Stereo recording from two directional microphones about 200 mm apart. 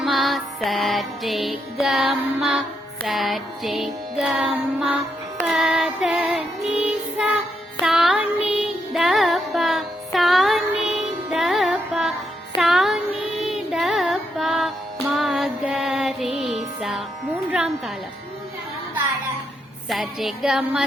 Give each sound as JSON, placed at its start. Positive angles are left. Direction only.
{"t": 0.0, "sound": "music", "side_deg": 0}
{"t": 11.3, "sound": "carnatic music", "side_deg": 0}
{"t": 15.1, "sound": "music", "side_deg": 0}
{"t": 17.5, "sound": "a sound", "side_deg": -5}
{"t": 19.9, "sound": "music", "side_deg": 0}